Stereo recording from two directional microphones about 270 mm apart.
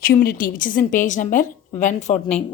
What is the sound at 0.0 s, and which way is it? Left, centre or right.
A woman's voice, left.